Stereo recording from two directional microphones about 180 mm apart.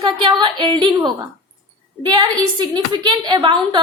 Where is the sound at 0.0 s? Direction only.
25° right (ahead or behind).